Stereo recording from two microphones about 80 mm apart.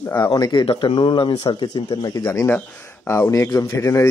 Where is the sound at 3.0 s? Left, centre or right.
Left.